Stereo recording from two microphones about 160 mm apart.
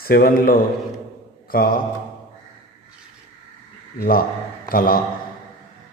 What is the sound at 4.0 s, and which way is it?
A man's voice, 65° left (ahead or behind).